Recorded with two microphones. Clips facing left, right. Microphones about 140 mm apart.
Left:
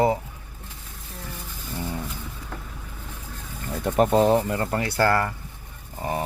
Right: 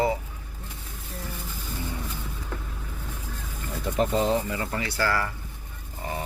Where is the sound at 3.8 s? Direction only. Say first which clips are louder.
Left 5 dB; 55° left (ahead or behind).